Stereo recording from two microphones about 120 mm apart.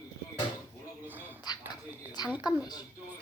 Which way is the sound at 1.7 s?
35° left (ahead or behind).